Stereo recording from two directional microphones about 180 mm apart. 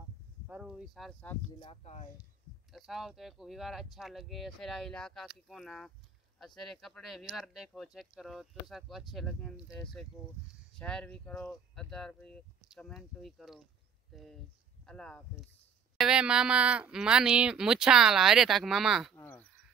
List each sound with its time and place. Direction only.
0.5 s speech: 5° right (ahead or behind)
1.6 s speech: 35° left (ahead or behind)
2.7 s speech: centre (ahead or behind)
16.0 s speech: 5° right (ahead or behind)
19.1 s speech: 10° left (ahead or behind)